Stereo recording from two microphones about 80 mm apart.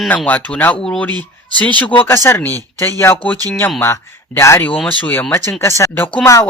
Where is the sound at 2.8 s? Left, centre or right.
Left.